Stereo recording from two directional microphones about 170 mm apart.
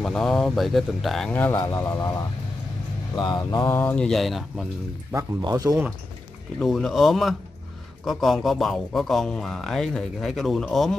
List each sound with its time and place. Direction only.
0.0 s a man's voice: centre (ahead or behind); by 2.2 s 15° left (ahead or behind)
3.2 s mantra: 25° left (ahead or behind)
3.7 s speech: 10° left (ahead or behind)
5.1 s speech: 20° right (ahead or behind)
6.6 s speech: centre (ahead or behind)